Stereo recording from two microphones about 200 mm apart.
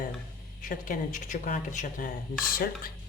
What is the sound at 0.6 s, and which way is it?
Speech, 40° left (ahead or behind).